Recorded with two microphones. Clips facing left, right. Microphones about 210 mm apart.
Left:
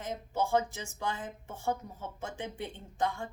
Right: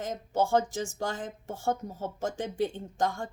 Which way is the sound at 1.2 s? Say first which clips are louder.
Right 4 dB; 90° right.